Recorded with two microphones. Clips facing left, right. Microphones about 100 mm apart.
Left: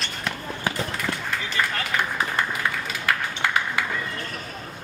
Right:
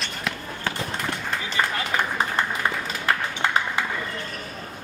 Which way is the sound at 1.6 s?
20° right (ahead or behind).